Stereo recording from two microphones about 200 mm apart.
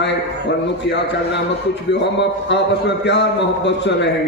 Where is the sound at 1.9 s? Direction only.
60° left (ahead or behind).